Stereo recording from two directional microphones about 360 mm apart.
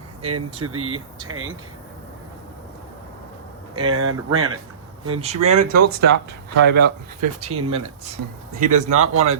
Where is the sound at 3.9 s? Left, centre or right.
Right.